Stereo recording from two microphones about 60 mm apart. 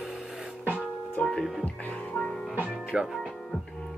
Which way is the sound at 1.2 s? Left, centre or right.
Left.